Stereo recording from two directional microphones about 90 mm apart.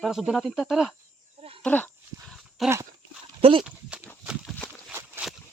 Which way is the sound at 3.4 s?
80° right.